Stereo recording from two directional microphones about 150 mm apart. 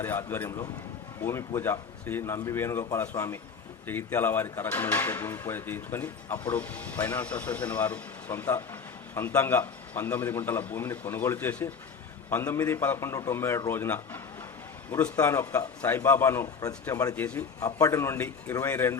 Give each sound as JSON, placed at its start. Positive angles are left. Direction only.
{"t": 0.0, "sound": "speech", "side_deg": 15}
{"t": 17.2, "sound": "speech", "side_deg": 10}
{"t": 17.7, "sound": "speech", "side_deg": 20}